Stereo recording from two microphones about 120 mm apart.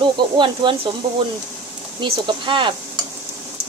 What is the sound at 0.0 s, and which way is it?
Speech, 45° right (ahead or behind).